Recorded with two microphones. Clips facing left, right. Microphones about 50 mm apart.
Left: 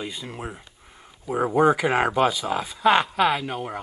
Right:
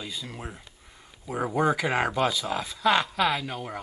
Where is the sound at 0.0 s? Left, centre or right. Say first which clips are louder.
Left 4 dB; left.